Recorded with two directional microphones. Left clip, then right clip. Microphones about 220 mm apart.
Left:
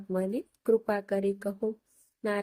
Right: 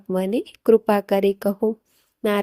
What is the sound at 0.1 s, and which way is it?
Speech, 35° right (ahead or behind).